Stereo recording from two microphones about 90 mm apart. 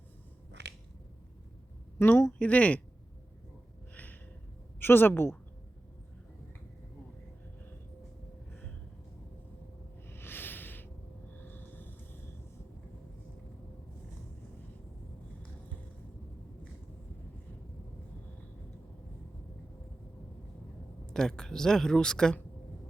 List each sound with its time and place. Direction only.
2.0 s a woman's voice: 30° left (ahead or behind)
2.4 s speech: 15° left (ahead or behind)
3.9 s a sound: 20° left (ahead or behind)
4.8 s a woman's voice: 25° left (ahead or behind)
10.1 s a sound: 25° left (ahead or behind)
21.1 s speech: 5° left (ahead or behind)